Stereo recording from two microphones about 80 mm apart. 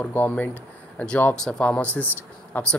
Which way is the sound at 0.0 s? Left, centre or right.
Left.